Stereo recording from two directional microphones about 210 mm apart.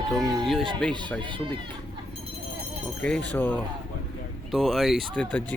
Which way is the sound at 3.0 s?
5° left (ahead or behind).